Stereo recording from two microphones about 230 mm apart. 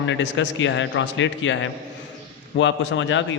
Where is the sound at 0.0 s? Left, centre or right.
Left.